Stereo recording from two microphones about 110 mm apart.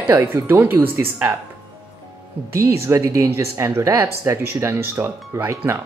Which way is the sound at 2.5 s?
25° right (ahead or behind).